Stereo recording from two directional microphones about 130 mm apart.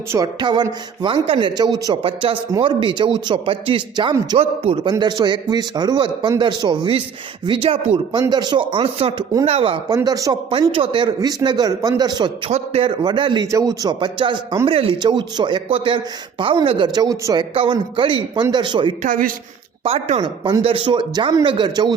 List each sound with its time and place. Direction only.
0.3 s a man's voice: 35° right (ahead or behind)
2.0 s a man's voice: 40° right (ahead or behind)
4.4 s a man's voice: 45° right (ahead or behind)
9.9 s speech: 30° right (ahead or behind)
10.5 s a man's voice: 40° right (ahead or behind)
12.5 s a man's voice: 55° right (ahead or behind)
13.0 s a man's voice: 35° right (ahead or behind)
13.5 s a man's voice: 25° right (ahead or behind)
17.5 s a man's voice: 40° right (ahead or behind)
19.0 s speech: 90° right
19.8 s a man's voice: 50° right (ahead or behind)